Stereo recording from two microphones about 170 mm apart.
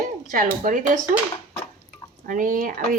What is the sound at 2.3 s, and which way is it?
Speech, 55° right (ahead or behind).